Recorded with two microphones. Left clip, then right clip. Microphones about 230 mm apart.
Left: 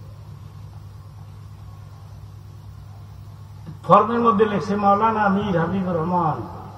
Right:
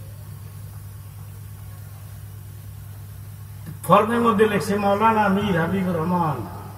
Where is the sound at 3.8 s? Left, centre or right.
Right.